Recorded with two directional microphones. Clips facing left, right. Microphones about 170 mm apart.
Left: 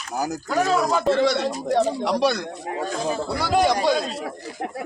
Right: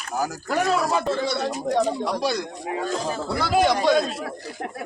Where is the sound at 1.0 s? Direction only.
85° left.